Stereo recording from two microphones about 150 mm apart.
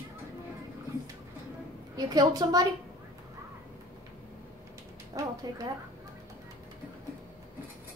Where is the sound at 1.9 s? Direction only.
25° right (ahead or behind).